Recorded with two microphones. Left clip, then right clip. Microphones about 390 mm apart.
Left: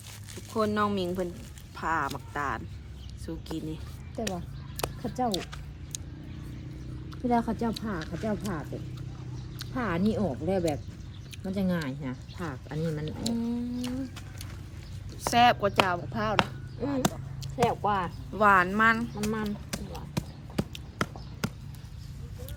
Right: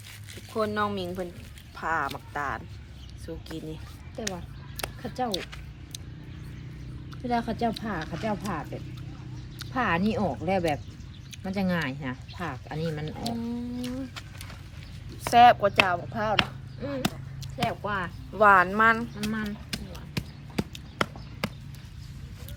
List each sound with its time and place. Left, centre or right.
0.5 s speech: centre
4.8 s a sound: centre
7.1 s speech: centre
9.7 s speech: centre
13.1 s speech: centre
16.3 s a sound: centre
17.6 s speech: centre
18.3 s speech: centre
19.2 s speech: centre
19.9 s basketball bounce: centre